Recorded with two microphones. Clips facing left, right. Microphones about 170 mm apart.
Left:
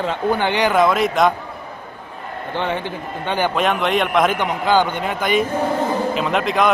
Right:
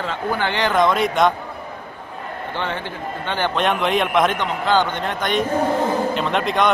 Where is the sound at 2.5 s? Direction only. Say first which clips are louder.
Left 5 dB; 15° left (ahead or behind).